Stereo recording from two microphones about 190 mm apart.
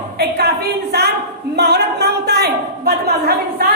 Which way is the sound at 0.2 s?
60° right (ahead or behind).